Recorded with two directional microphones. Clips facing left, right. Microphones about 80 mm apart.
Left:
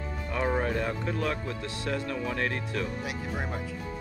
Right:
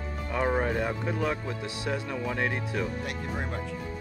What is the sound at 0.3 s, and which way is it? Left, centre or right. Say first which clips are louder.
Speech: right 1 dB; centre.